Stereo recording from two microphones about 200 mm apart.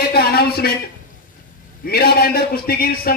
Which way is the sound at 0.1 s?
50° left (ahead or behind).